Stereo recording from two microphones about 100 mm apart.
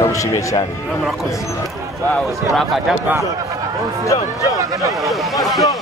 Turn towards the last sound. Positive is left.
turn(degrees=0)  # may be behind; listen again after turning